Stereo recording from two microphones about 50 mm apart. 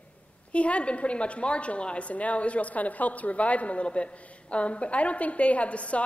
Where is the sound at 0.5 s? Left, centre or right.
Left.